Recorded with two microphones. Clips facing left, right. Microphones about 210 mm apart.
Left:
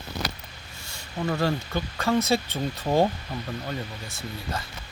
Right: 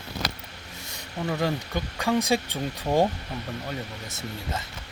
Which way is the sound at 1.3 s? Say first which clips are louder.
Left 1 dB; 15° right (ahead or behind).